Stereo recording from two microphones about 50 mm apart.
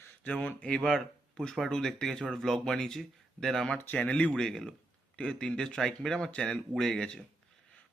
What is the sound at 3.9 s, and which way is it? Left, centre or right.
Speech, left.